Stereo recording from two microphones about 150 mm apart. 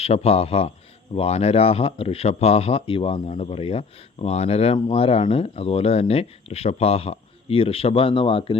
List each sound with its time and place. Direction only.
0.0 s a man's voice: 40° left (ahead or behind)